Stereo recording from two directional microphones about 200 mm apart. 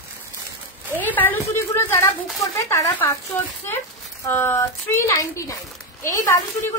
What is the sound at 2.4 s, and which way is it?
Speech, 15° left (ahead or behind).